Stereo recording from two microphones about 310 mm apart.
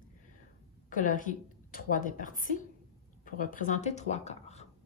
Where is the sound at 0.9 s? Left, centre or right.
Left.